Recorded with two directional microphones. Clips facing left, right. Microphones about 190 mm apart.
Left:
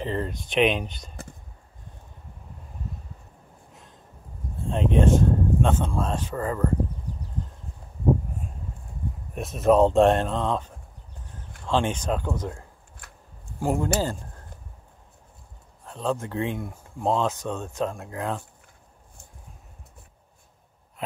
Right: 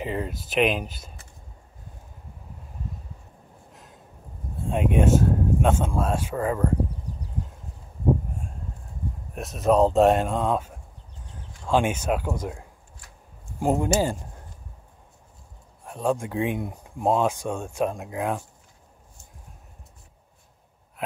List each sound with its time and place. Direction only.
0.0 s speech: 10° right (ahead or behind)
4.6 s speech: 10° right (ahead or behind)
9.3 s speech: centre (ahead or behind)
13.0 s a sound: 60° left (ahead or behind)
13.6 s speech: 20° right (ahead or behind)
15.8 s speech: 15° right (ahead or behind)